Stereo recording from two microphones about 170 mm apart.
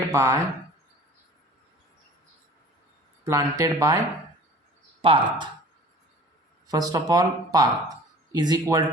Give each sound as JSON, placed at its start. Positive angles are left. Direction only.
{"t": 0.1, "sound": "speech", "side_deg": -15}
{"t": 3.2, "sound": "speech", "side_deg": -20}
{"t": 5.0, "sound": "speech", "side_deg": -30}
{"t": 6.7, "sound": "speech", "side_deg": -20}